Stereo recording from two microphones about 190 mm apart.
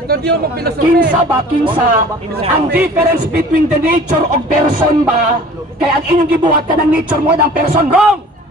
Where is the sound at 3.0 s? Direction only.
55° right (ahead or behind).